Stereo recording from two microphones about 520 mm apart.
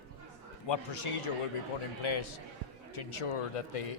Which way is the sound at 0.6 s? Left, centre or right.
Left.